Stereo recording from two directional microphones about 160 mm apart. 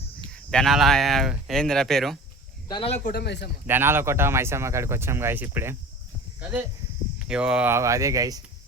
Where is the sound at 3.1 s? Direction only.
90° left.